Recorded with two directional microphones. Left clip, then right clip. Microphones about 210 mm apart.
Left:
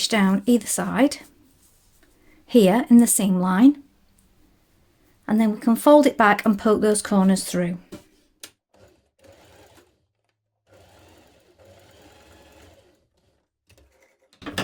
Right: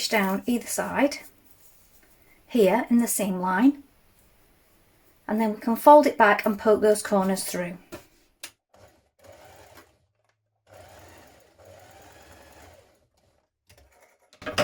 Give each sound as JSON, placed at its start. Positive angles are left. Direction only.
{"t": 0.1, "sound": "speech", "side_deg": 55}
{"t": 2.5, "sound": "speech", "side_deg": 55}
{"t": 5.2, "sound": "speech", "side_deg": 55}